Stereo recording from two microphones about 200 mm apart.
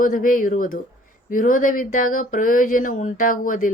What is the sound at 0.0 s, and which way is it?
Speech, 45° left (ahead or behind).